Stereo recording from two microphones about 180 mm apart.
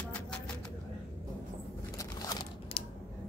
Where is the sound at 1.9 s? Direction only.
20° left (ahead or behind).